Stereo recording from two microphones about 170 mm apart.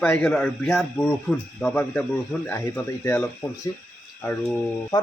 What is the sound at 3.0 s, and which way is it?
Speech, 15° left (ahead or behind).